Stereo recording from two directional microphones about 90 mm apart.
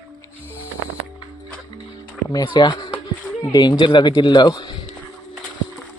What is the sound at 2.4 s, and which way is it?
Speech, 60° left (ahead or behind).